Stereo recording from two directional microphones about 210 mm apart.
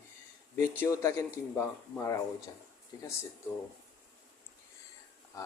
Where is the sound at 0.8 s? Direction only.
15° left (ahead or behind).